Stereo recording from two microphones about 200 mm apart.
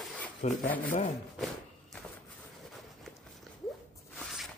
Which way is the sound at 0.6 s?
10° left (ahead or behind).